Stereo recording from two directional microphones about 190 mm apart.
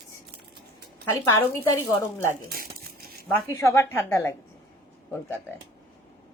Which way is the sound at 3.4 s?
15° left (ahead or behind).